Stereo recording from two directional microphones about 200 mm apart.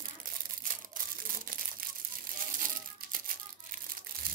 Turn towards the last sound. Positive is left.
turn(degrees=-45)  # may be behind; listen again after turning